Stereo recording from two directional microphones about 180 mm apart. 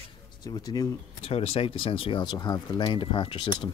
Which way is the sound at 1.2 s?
35° left (ahead or behind).